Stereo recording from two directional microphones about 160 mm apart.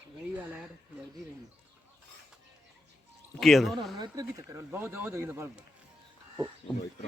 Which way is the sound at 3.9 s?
25° right (ahead or behind).